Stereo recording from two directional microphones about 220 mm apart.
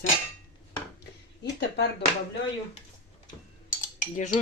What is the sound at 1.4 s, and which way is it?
Speech, 50° left (ahead or behind).